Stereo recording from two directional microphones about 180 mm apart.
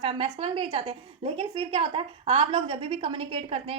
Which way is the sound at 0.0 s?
30° right (ahead or behind).